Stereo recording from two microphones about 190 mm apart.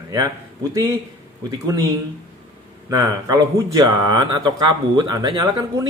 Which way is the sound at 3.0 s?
20° right (ahead or behind).